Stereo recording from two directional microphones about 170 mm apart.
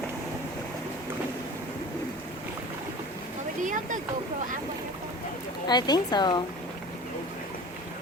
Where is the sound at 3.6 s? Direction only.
50° right (ahead or behind).